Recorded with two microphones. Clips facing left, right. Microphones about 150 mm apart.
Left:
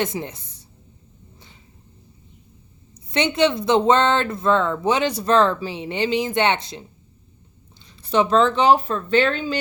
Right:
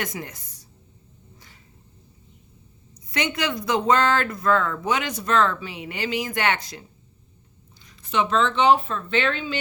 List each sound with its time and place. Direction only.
0.0 s speech: 25° left (ahead or behind)
3.1 s speech: 25° left (ahead or behind)
7.9 s speech: 35° left (ahead or behind)